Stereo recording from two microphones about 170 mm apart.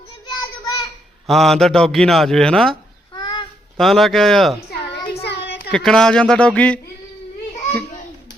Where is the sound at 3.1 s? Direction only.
30° left (ahead or behind).